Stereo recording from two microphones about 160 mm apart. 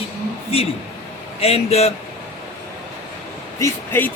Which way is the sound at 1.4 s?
40° left (ahead or behind).